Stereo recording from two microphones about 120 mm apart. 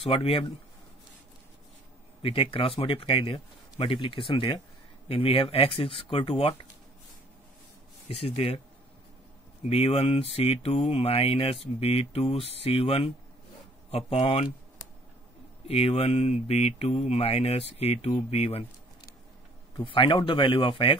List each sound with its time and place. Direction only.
0.0 s speech: 50° left (ahead or behind)
2.2 s speech: 50° left (ahead or behind)
8.1 s speech: 55° left (ahead or behind)
9.6 s speech: 55° left (ahead or behind)
15.7 s speech: 55° left (ahead or behind)
19.8 s speech: 45° left (ahead or behind)